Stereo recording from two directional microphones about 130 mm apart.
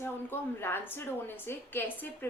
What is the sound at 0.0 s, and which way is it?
A woman's voice, 15° left (ahead or behind).